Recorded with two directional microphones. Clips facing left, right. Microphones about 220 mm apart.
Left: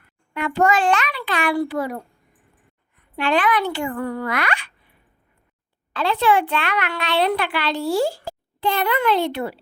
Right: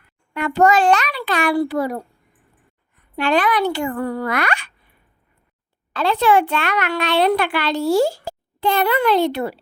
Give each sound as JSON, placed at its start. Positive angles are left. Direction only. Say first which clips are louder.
{"t": 0.3, "sound": "a child's voice", "louder": "right 3 dB", "side_deg": -40}
{"t": 5.9, "sound": "a child's voice", "louder": "right 3 dB", "side_deg": -40}